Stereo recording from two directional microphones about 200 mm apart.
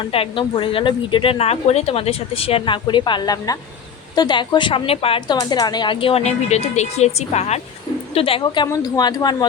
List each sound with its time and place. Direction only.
0.0 s a woman's voice: 25° left (ahead or behind)